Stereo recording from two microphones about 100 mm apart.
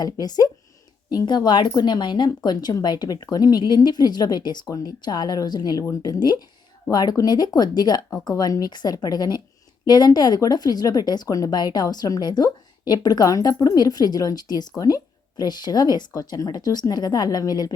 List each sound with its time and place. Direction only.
0.0 s a woman's voice: 40° left (ahead or behind)